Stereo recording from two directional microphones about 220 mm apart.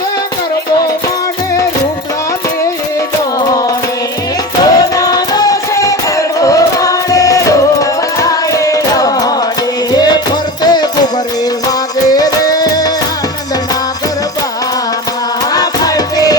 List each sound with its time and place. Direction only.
4.6 s music: 15° left (ahead or behind)
12.1 s music: 15° left (ahead or behind)
15.5 s music: 15° left (ahead or behind)